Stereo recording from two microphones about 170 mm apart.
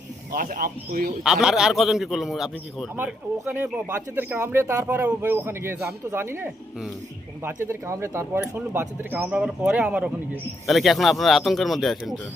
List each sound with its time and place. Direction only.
0.3 s speech: 50° right (ahead or behind)
1.2 s a man's voice: 5° right (ahead or behind)